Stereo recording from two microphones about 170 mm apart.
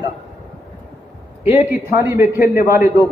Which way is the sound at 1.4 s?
15° right (ahead or behind).